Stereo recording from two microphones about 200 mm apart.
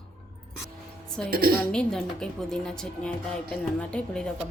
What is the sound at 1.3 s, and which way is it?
Speech, 50° right (ahead or behind).